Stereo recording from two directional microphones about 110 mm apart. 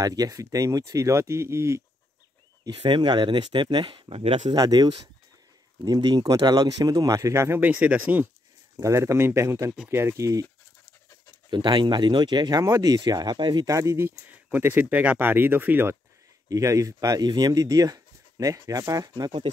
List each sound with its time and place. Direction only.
0.0 s speech: 35° right (ahead or behind)
2.7 s speech: 50° right (ahead or behind)
4.6 s speech: 40° right (ahead or behind); by 8.3 s 15° right (ahead or behind)
8.7 s speech: 25° right (ahead or behind)
11.5 s speech: 45° right (ahead or behind)
13.7 s speech: 30° right (ahead or behind)
16.4 s speech: 30° right (ahead or behind)